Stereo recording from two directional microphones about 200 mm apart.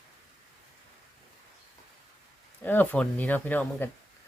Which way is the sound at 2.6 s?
10° left (ahead or behind).